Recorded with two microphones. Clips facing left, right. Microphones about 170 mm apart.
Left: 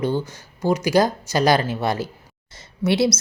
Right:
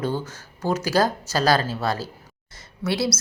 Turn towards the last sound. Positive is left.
turn(degrees=20)  # may be behind; listen again after turning